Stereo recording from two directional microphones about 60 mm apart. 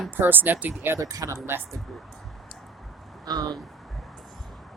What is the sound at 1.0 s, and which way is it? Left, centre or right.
Speech, right.